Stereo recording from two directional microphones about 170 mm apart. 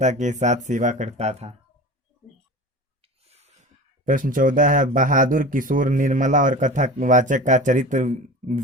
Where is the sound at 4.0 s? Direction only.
50° right (ahead or behind).